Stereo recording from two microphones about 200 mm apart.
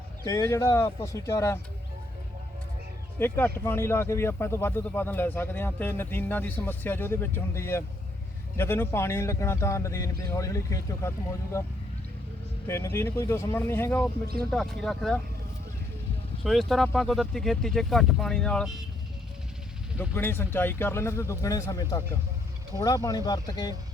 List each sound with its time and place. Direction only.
0.3 s speech: 15° left (ahead or behind)
3.2 s speech: 10° left (ahead or behind)
12.6 s speech: 15° left (ahead or behind)
16.4 s speech: centre (ahead or behind)
20.0 s speech: 10° left (ahead or behind)